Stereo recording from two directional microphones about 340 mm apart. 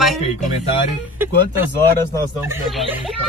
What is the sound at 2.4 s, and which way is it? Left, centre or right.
Speech, centre.